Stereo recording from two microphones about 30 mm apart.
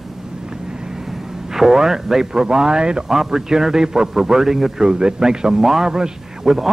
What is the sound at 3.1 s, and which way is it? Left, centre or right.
A man's voice, centre.